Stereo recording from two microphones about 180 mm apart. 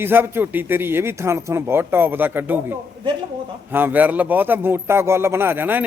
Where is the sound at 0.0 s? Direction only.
10° right (ahead or behind).